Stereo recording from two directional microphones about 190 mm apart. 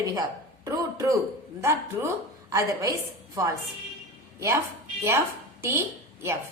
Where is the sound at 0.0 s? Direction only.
20° right (ahead or behind).